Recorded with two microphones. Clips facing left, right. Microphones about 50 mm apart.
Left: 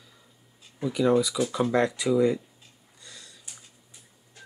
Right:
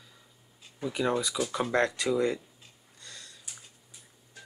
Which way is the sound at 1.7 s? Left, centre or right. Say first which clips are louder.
Left 2 dB; right.